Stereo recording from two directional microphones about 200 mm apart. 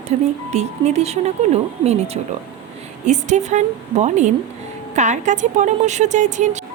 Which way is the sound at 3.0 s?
35° right (ahead or behind).